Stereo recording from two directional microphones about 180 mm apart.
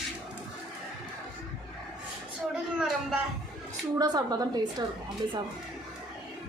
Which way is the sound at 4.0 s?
20° right (ahead or behind).